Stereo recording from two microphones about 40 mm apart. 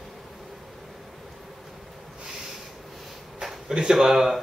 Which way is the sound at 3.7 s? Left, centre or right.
Right.